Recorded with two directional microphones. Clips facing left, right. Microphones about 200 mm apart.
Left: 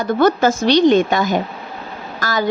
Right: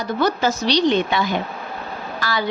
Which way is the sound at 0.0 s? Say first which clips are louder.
Left 6 dB; 50° left (ahead or behind).